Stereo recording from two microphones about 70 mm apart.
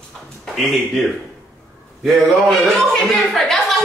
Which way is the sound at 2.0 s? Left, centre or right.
Centre.